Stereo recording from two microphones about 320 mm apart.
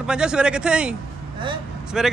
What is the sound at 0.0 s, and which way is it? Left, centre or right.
Speech, centre.